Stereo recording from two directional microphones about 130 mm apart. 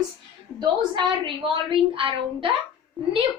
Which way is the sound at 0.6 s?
40° right (ahead or behind).